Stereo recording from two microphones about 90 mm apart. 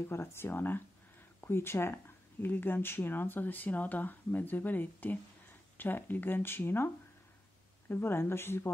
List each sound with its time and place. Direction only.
0.1 s speech: 30° left (ahead or behind)
7.9 s speech: 25° left (ahead or behind)